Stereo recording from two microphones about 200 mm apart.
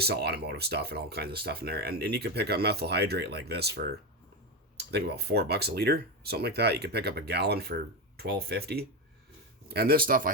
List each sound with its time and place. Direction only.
0.0 s speech: 55° right (ahead or behind)